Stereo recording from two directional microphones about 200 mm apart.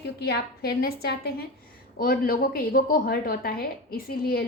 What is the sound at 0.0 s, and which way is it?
A woman's voice, 55° left (ahead or behind).